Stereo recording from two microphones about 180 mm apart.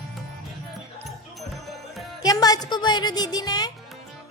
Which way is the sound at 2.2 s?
20° left (ahead or behind).